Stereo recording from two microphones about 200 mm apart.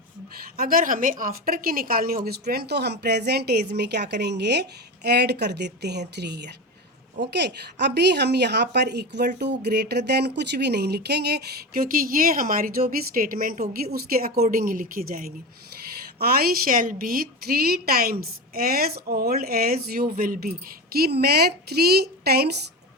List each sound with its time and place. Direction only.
0.5 s a woman's voice: 45° right (ahead or behind)